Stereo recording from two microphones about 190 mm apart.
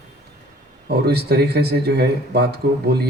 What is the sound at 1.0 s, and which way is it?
Speech, 55° right (ahead or behind).